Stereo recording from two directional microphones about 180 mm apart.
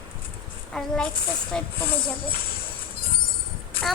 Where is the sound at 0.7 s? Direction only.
5° left (ahead or behind).